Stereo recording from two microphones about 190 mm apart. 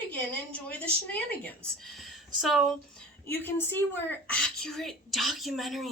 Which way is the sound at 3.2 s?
10° left (ahead or behind).